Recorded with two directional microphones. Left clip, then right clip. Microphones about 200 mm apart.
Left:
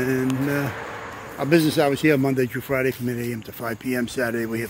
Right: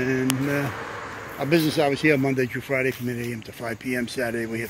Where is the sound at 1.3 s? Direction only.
15° left (ahead or behind).